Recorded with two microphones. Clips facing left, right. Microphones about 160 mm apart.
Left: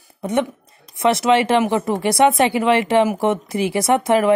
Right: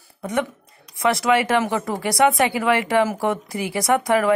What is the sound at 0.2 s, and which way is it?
Speech, 25° left (ahead or behind).